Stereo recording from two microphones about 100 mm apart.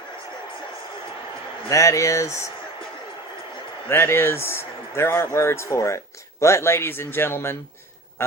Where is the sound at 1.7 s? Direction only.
30° left (ahead or behind).